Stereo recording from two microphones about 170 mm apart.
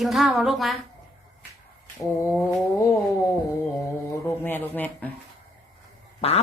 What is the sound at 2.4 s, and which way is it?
Cat, 20° left (ahead or behind).